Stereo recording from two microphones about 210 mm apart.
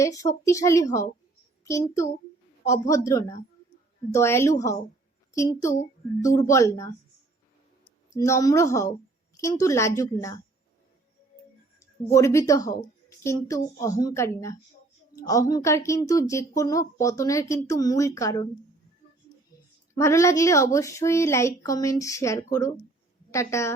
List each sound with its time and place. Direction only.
0.0 s a woman's voice: 15° left (ahead or behind)
8.1 s a woman's voice: 15° left (ahead or behind)
11.8 s a woman's voice: 15° left (ahead or behind)
20.0 s a woman's voice: 15° left (ahead or behind)